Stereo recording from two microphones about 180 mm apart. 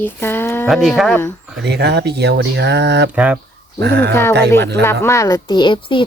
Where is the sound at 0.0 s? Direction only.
10° left (ahead or behind).